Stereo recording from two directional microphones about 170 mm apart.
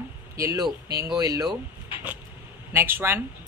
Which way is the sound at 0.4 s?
15° right (ahead or behind).